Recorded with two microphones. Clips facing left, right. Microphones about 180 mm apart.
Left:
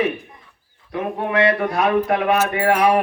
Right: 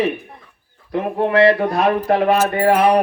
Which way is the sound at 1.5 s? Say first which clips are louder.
Right 3 dB; 30° right (ahead or behind).